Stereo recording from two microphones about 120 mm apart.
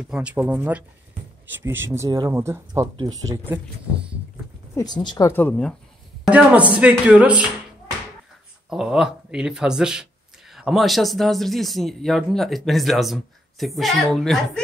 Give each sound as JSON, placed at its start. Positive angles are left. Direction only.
{"t": 0.1, "sound": "speech", "side_deg": -10}
{"t": 4.7, "sound": "speech", "side_deg": 35}
{"t": 5.3, "sound": "speech", "side_deg": 10}
{"t": 6.2, "sound": "speech", "side_deg": -10}
{"t": 8.6, "sound": "speech", "side_deg": -5}